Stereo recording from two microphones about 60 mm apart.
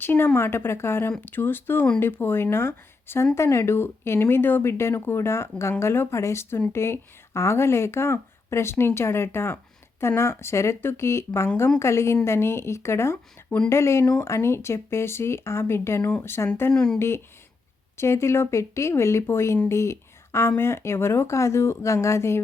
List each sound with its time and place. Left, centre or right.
0.0 s speech: left
16.7 s speech: centre
17.9 s speech: left